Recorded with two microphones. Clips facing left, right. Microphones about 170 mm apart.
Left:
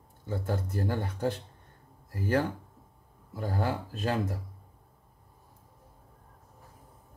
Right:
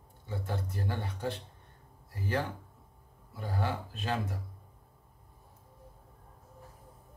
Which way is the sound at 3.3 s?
45° left (ahead or behind).